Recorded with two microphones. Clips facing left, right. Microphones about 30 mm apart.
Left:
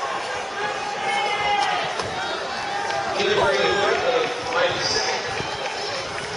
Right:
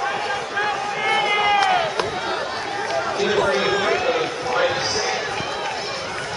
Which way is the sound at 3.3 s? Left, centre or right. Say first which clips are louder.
Left 1 dB; centre.